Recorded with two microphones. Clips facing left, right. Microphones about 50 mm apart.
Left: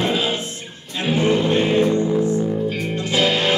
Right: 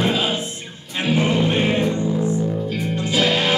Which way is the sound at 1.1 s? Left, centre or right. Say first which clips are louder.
Left 2 dB; right.